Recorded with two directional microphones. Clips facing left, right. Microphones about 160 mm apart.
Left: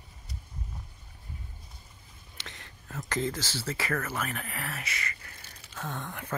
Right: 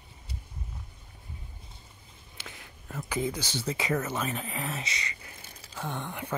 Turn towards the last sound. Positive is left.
turn(degrees=-15)  # may be behind; listen again after turning